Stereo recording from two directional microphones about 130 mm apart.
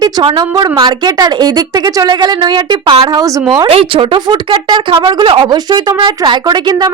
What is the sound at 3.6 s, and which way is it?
Speech, 45° right (ahead or behind).